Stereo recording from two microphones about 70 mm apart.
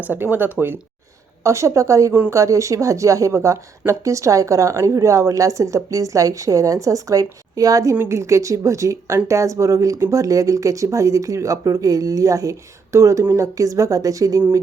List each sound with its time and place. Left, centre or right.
0.0 s speech: right
1.5 s a woman's voice: right